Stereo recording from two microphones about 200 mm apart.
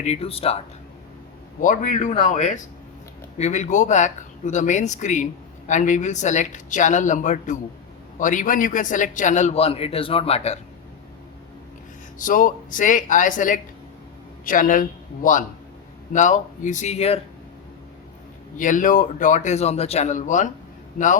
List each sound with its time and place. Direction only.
0.0 s speech: 30° left (ahead or behind)
1.6 s speech: 40° left (ahead or behind)
12.2 s speech: 40° left (ahead or behind)
18.5 s speech: 40° left (ahead or behind)